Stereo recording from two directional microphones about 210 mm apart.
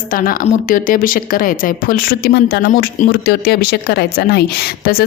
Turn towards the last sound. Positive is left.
turn(degrees=50)  # may be behind; listen again after turning